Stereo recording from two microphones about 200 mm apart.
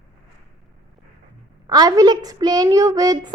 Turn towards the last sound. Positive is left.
turn(degrees=-20)  # may be behind; listen again after turning